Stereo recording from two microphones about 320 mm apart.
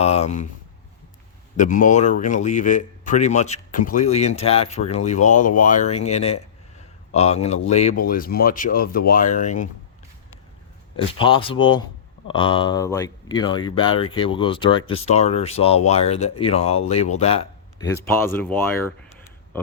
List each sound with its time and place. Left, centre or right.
0.0 s a man's voice: centre
1.5 s a man's voice: left
10.9 s speech: centre